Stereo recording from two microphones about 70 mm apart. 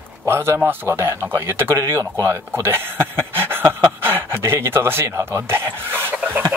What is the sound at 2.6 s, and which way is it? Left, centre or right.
Speech, right.